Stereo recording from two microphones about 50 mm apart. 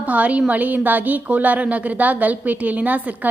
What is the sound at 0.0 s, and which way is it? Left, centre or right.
A woman's voice, right.